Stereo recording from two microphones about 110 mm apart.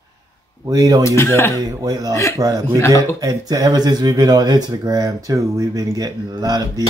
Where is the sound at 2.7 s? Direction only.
25° left (ahead or behind).